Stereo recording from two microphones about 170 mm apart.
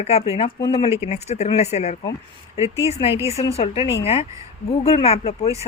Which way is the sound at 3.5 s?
35° left (ahead or behind).